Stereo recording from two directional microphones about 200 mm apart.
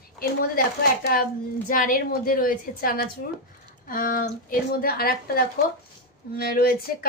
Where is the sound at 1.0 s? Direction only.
45° left (ahead or behind).